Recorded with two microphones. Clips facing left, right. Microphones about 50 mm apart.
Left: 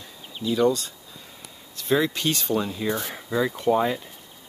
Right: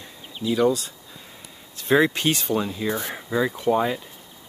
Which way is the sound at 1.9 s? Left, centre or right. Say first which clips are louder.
Right 4 dB; right.